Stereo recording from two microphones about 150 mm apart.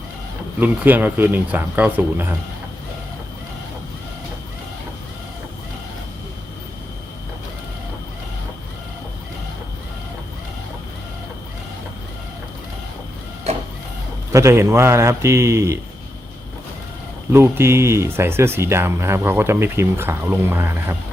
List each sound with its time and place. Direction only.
0.6 s speech: 10° right (ahead or behind)
14.3 s a man's voice: 20° right (ahead or behind)
17.3 s speech: 15° right (ahead or behind)